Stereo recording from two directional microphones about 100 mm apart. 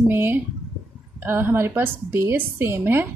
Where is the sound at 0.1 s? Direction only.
20° right (ahead or behind).